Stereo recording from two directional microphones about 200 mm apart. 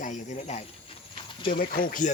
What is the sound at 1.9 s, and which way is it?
Speech, 40° left (ahead or behind).